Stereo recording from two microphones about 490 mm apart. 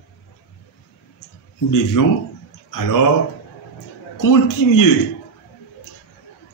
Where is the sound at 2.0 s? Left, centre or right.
Left.